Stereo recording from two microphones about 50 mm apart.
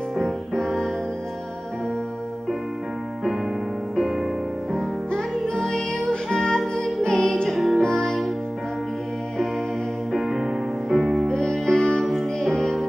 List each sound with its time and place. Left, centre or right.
0.2 s music: centre
4.7 s music: centre
7.4 s music: centre
7.8 s music: centre
10.1 s music: centre
11.2 s music: centre